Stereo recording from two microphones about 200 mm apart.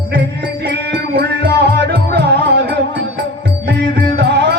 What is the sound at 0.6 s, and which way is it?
Music, 55° right (ahead or behind).